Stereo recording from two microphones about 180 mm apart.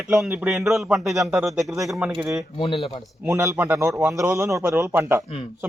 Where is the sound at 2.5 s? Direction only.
30° left (ahead or behind).